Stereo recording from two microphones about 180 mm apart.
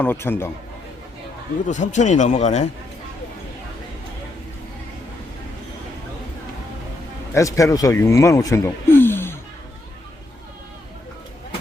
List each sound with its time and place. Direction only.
0.0 s a man's voice: 10° left (ahead or behind)
1.6 s a man's voice: 45° left (ahead or behind)
7.3 s speech: 15° left (ahead or behind)